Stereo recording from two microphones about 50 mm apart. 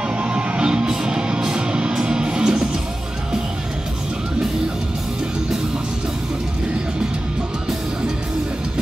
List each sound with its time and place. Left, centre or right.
0.2 s music: right